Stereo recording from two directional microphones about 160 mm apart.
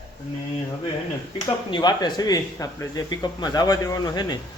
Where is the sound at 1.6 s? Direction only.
30° left (ahead or behind).